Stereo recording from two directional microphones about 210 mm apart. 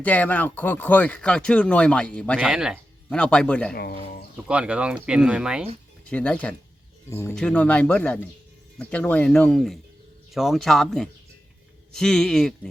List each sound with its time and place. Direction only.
0.0 s speech: 10° left (ahead or behind)
3.8 s speech: 45° left (ahead or behind)
4.4 s speech: 5° right (ahead or behind)
6.1 s speech: 5° left (ahead or behind)